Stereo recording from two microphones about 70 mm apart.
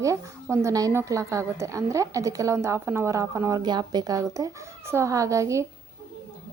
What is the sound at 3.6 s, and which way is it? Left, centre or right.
Speech, right.